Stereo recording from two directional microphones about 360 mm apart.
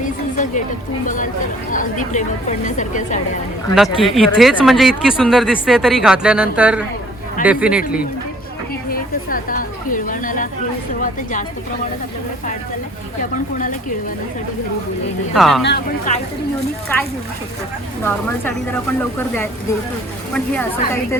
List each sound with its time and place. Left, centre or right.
0.0 s a sound: left
1.0 s a woman's voice: left
3.8 s speech: centre
8.9 s a sound: left
11.0 s a woman's voice: left
15.4 s speech: centre
15.6 s a woman's voice: left
20.3 s a woman's voice: centre